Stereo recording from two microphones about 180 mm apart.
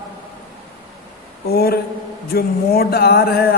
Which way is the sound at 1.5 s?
60° left (ahead or behind).